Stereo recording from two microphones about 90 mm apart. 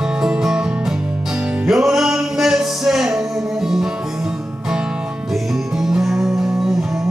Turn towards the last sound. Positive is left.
turn(degrees=-5)  # may be behind; listen again after turning